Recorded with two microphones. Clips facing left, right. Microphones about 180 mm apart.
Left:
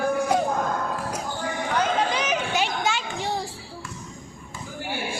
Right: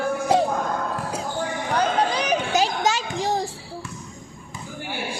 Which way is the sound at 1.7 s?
35° right (ahead or behind).